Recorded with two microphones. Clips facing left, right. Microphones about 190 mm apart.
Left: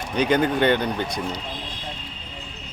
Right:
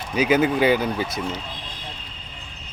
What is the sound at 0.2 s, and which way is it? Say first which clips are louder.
Speech: right 1 dB; 5° right (ahead or behind).